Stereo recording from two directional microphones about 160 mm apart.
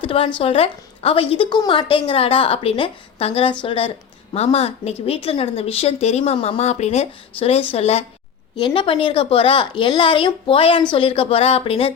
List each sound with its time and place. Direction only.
0.0 s a woman's voice: 35° left (ahead or behind)